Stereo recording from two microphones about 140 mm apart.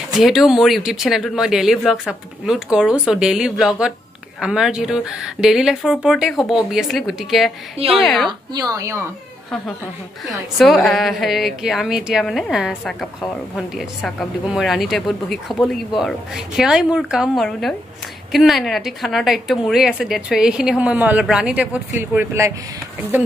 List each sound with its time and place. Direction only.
0.2 s a woman's voice: centre (ahead or behind)
8.3 s a woman's voice: 25° right (ahead or behind)
10.2 s a woman's voice: centre (ahead or behind); by 22.5 s 15° right (ahead or behind)